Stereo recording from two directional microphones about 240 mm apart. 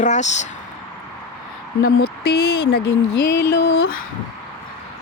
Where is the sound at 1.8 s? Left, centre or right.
Left.